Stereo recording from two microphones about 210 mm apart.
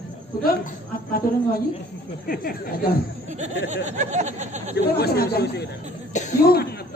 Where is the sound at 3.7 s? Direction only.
35° right (ahead or behind).